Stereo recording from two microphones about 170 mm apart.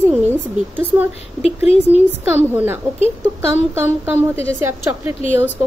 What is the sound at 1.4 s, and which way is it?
Speech, 35° left (ahead or behind).